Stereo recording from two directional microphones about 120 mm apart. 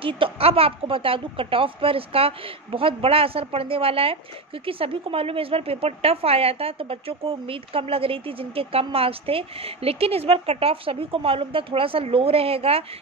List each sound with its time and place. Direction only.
0.0 s a woman's voice: 50° right (ahead or behind)